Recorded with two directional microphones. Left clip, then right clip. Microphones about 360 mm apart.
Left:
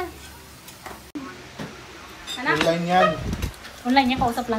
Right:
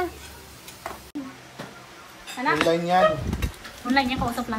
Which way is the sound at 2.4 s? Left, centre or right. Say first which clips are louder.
Even; right.